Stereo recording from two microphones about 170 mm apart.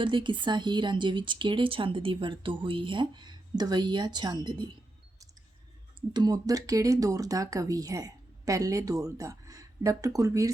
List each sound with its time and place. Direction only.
0.0 s speech: 30° right (ahead or behind)
6.1 s speech: 25° right (ahead or behind)